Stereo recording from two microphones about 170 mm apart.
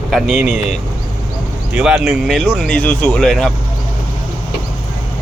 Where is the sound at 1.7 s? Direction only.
5° right (ahead or behind).